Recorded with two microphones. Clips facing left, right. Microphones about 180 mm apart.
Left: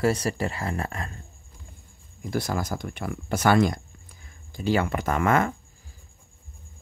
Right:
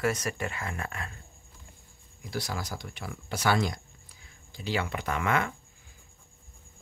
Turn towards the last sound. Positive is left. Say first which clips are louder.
# left 6 dB
turn(degrees=45)  # may be behind; listen again after turning